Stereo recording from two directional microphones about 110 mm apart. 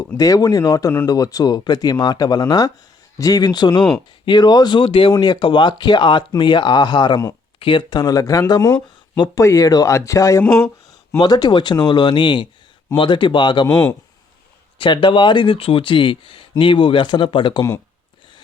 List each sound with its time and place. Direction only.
0.2 s speech: 35° left (ahead or behind)
9.4 s speech: 30° left (ahead or behind); by 17.6 s 50° left (ahead or behind)